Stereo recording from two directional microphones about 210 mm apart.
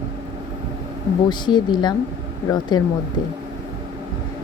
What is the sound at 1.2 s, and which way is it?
Speech, 20° left (ahead or behind).